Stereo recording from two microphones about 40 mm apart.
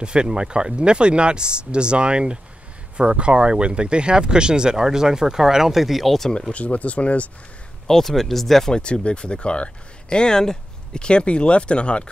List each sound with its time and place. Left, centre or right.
0.0 s speech: right; by 6.3 s centre
6.5 s speech: left
7.8 s speech: centre
8.7 s speech: left